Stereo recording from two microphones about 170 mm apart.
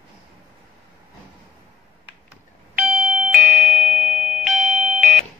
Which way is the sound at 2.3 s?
5° right (ahead or behind).